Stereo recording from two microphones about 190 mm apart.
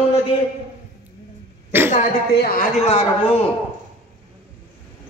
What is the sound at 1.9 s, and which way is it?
Speech, 50° left (ahead or behind).